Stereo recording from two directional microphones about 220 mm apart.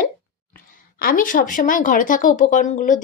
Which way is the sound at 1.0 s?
40° left (ahead or behind).